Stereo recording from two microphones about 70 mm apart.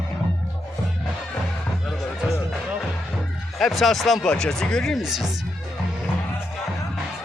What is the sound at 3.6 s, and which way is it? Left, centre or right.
Speech, centre.